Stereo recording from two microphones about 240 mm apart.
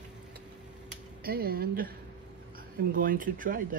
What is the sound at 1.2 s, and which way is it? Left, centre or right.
Speech, right.